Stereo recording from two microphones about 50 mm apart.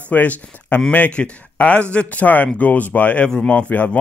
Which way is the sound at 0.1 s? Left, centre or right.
Left.